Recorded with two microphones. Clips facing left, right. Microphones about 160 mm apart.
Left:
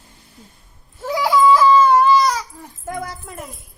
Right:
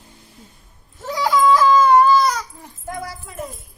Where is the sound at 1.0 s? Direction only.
5° left (ahead or behind).